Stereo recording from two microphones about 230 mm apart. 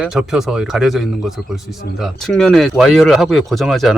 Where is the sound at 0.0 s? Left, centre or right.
Centre.